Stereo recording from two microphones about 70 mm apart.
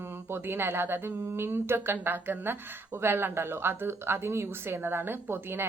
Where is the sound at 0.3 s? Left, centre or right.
Right.